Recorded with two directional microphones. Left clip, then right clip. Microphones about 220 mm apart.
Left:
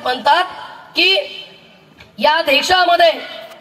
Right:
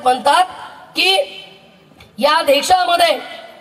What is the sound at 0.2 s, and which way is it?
A woman's voice, 50° right (ahead or behind).